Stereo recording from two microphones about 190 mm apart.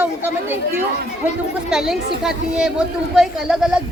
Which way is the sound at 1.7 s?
Centre (ahead or behind).